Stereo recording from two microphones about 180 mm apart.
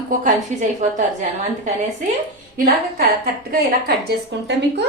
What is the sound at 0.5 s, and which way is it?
Speech, 40° right (ahead or behind).